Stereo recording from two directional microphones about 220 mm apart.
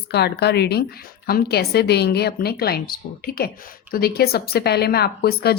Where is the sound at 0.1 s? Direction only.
50° left (ahead or behind).